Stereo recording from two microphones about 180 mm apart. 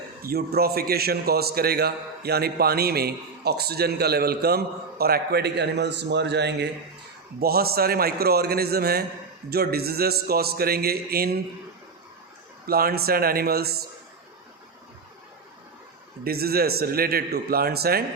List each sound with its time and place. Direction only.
0.2 s a man's voice: 55° right (ahead or behind)
7.3 s a man's voice: 60° right (ahead or behind)
12.6 s a man's voice: 55° right (ahead or behind)
16.2 s a man's voice: 60° right (ahead or behind)